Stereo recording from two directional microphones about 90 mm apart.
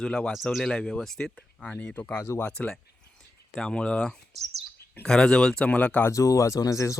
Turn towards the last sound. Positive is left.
turn(degrees=35)  # may be behind; listen again after turning